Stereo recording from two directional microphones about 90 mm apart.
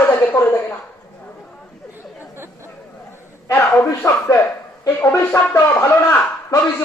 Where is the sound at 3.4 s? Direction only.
35° left (ahead or behind).